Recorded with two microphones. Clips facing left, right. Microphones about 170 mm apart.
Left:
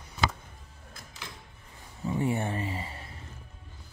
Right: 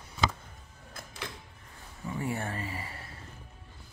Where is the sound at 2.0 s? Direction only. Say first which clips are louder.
Left 5 dB; 20° left (ahead or behind).